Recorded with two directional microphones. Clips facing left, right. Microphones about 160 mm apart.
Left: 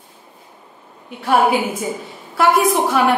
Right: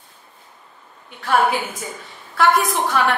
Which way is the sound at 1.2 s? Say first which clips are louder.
Left 3 dB; 10° left (ahead or behind).